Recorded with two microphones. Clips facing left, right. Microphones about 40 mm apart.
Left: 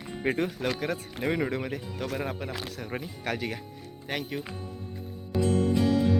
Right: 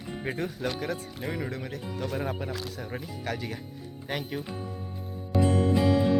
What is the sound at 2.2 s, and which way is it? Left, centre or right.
Speech, centre.